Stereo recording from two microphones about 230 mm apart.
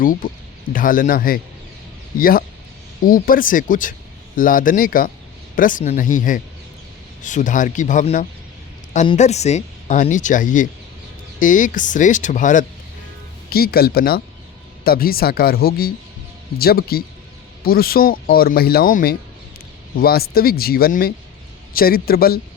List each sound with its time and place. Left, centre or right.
0.0 s speech: left